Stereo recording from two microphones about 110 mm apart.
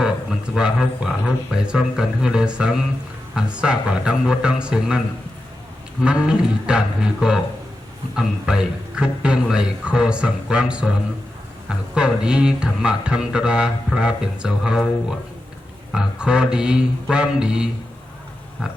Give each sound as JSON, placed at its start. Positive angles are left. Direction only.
{"t": 0.0, "sound": "a man's voice", "side_deg": -5}
{"t": 6.0, "sound": "speech", "side_deg": -5}
{"t": 11.9, "sound": "speech", "side_deg": -5}
{"t": 15.9, "sound": "speech", "side_deg": -5}